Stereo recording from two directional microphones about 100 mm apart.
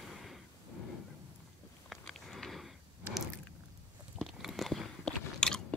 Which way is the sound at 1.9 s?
Centre (ahead or behind).